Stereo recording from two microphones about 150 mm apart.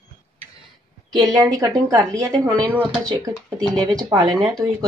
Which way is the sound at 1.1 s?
25° right (ahead or behind).